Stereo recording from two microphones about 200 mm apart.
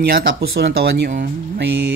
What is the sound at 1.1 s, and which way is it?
Music, 55° right (ahead or behind).